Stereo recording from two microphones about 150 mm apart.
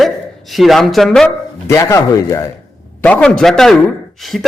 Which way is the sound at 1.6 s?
20° left (ahead or behind).